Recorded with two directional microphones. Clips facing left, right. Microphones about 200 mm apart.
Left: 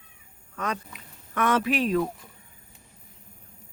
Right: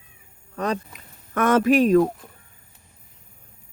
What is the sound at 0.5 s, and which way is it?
Speech, 35° right (ahead or behind).